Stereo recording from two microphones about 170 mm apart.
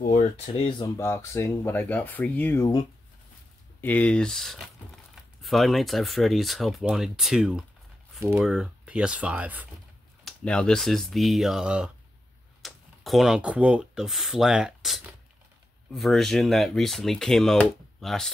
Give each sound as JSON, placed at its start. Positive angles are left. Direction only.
{"t": 0.0, "sound": "a sound", "side_deg": 45}
{"t": 0.5, "sound": "speech", "side_deg": 30}
{"t": 0.9, "sound": "speech", "side_deg": 15}
{"t": 3.8, "sound": "speech", "side_deg": 10}
{"t": 10.2, "sound": "speech", "side_deg": 5}